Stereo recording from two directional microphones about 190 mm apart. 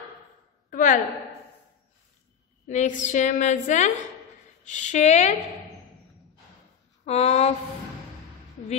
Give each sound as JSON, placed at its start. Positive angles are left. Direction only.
{"t": 0.7, "sound": "a sound", "side_deg": 45}
{"t": 2.6, "sound": "a woman's voice", "side_deg": 40}
{"t": 7.1, "sound": "a woman's voice", "side_deg": 35}